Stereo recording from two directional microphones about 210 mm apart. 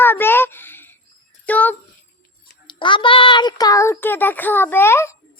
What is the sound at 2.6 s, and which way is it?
A child's voice, 25° left (ahead or behind).